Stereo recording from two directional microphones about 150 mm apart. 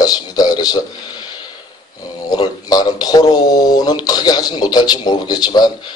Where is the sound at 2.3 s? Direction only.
25° left (ahead or behind).